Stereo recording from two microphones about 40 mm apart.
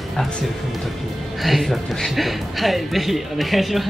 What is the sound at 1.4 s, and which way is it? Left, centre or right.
A woman's voice, centre.